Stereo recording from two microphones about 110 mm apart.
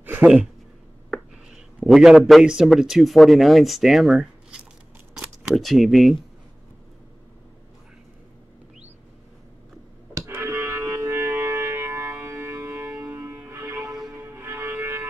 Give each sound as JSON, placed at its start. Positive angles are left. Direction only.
{"t": 0.0, "sound": "a sound", "side_deg": -15}
{"t": 1.8, "sound": "a man's voice", "side_deg": -5}
{"t": 10.1, "sound": "music", "side_deg": -25}